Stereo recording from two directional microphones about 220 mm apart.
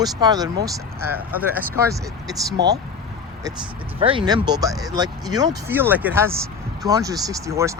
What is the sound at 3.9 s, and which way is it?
Speech, 25° right (ahead or behind).